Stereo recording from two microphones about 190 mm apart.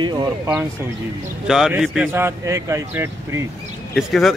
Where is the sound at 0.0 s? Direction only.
25° right (ahead or behind).